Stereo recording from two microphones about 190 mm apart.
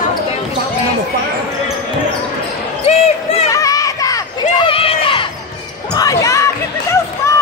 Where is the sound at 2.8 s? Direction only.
35° left (ahead or behind).